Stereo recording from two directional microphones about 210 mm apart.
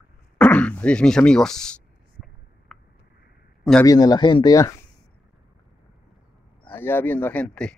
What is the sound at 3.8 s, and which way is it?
Speech, 15° left (ahead or behind).